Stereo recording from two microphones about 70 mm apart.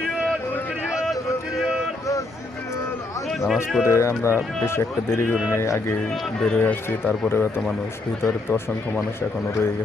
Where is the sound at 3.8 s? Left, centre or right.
Left.